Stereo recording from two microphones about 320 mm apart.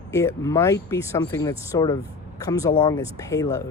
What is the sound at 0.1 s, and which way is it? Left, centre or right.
Speech, centre.